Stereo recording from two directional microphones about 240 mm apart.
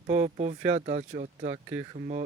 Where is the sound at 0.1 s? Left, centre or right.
Right.